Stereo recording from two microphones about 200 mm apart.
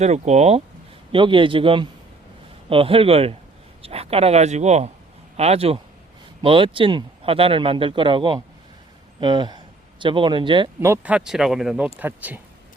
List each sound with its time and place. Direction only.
0.0 s speech: 35° right (ahead or behind)
10.8 s speech: 10° right (ahead or behind)